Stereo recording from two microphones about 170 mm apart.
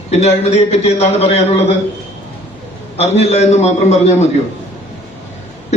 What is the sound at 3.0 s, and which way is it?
A man's voice, 40° left (ahead or behind).